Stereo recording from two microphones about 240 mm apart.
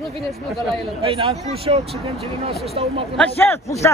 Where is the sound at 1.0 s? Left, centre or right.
Right.